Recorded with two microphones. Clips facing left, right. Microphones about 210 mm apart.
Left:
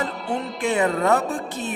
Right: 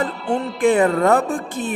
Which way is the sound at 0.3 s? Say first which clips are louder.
Right 9 dB; 50° right (ahead or behind).